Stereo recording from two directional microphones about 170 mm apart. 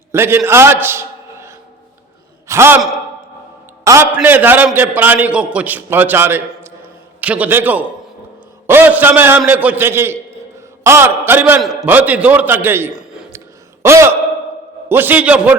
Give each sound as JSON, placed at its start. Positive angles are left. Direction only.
{"t": 0.1, "sound": "a man's voice", "side_deg": -15}
{"t": 3.8, "sound": "a man's voice", "side_deg": -15}
{"t": 11.6, "sound": "a man's voice", "side_deg": 0}
{"t": 13.8, "sound": "a man's voice", "side_deg": -15}